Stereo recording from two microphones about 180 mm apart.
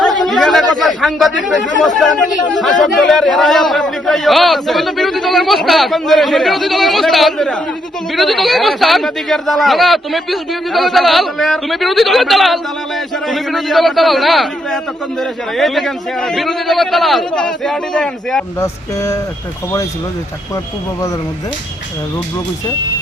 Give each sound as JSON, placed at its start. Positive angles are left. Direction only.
{"t": 0.3, "sound": "a man's voice", "side_deg": 0}
{"t": 18.6, "sound": "speech", "side_deg": 15}